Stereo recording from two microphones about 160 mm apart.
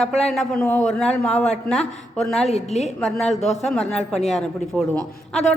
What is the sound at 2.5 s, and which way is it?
Speech, 45° left (ahead or behind).